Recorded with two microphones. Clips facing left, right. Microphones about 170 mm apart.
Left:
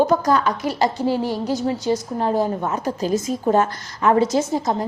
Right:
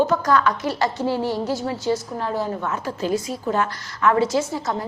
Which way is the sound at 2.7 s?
40° left (ahead or behind).